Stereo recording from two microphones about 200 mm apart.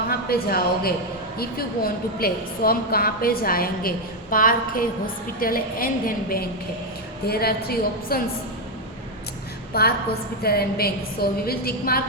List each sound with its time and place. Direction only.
0.1 s a woman's voice: 50° left (ahead or behind)
9.7 s a woman's voice: 50° left (ahead or behind)